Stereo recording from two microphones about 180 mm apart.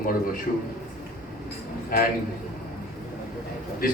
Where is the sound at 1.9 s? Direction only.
55° left (ahead or behind).